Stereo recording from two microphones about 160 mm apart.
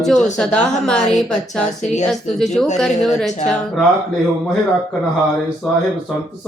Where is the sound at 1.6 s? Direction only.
45° left (ahead or behind).